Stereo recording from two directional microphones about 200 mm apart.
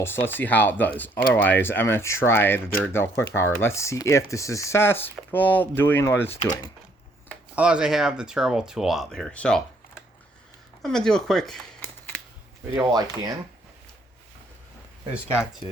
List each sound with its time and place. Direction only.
0.0 s speech: 10° left (ahead or behind)
7.5 s speech: 5° right (ahead or behind)
10.8 s a sound: 5° left (ahead or behind)
12.7 s speech: 15° right (ahead or behind)